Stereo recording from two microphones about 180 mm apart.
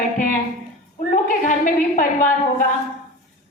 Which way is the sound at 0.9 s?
45° left (ahead or behind).